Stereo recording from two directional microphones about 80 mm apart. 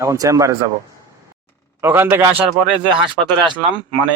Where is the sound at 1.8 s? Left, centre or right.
Right.